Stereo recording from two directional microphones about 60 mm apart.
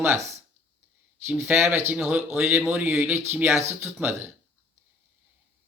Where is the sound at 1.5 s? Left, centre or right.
Right.